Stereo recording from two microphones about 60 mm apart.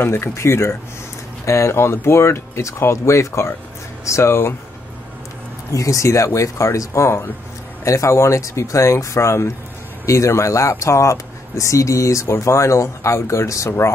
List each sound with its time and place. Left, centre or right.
0.0 s speech: left
5.7 s speech: left